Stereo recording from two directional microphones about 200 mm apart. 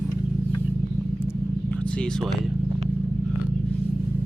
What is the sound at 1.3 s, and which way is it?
Vehicle, 5° left (ahead or behind).